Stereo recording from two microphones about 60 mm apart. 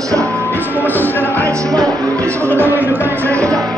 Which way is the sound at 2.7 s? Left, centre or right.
Right.